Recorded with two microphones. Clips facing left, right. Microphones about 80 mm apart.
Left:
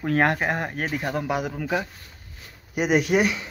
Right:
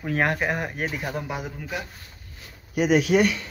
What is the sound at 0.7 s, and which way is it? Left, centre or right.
Speech, left.